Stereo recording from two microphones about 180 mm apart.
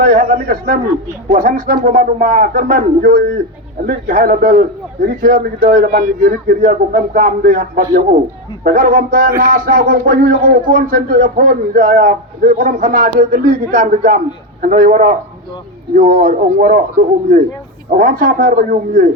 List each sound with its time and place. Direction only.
0.0 s a man's voice: 55° right (ahead or behind)
1.3 s speech: 45° right (ahead or behind)
1.5 s speech: 55° right (ahead or behind)
17.9 s speech: 50° right (ahead or behind)